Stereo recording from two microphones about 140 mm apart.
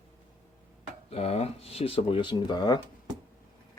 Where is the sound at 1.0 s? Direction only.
45° left (ahead or behind).